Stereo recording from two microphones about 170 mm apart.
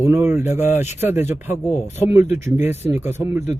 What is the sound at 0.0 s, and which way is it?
Speech, 15° right (ahead or behind).